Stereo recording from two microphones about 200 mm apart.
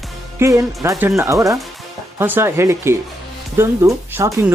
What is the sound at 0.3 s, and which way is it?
Speech, 15° right (ahead or behind).